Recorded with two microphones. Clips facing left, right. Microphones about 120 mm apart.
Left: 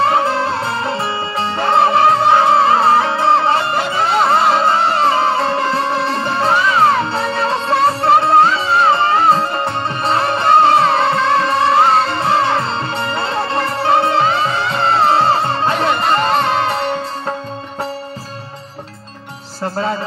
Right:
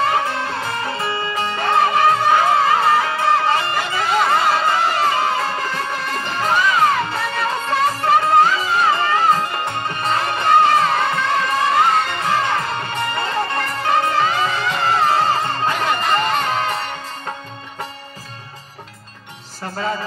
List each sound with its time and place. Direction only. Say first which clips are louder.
0.0 s music: left 5 dB; 30° left (ahead or behind)